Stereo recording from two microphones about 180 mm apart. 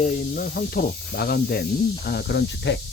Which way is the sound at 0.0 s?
50° left (ahead or behind).